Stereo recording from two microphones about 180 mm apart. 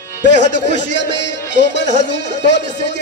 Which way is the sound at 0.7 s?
80° left.